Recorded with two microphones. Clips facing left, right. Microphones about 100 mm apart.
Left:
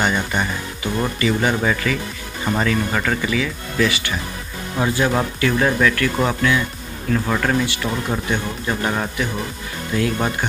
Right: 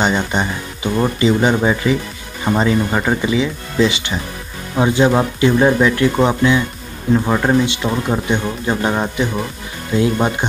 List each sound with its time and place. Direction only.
0.0 s speech: 20° right (ahead or behind)